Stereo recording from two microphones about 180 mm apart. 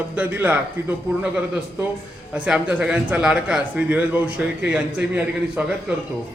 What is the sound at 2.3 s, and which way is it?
A man's voice, 5° right (ahead or behind).